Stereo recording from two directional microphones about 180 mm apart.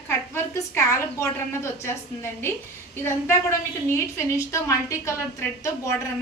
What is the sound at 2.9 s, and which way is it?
A woman's voice, 15° left (ahead or behind).